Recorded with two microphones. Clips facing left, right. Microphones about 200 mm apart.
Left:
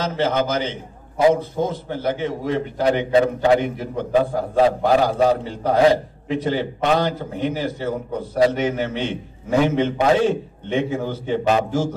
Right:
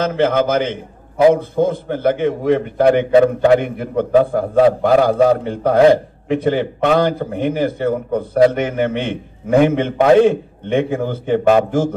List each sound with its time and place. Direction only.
0.0 s a man's voice: 55° right (ahead or behind)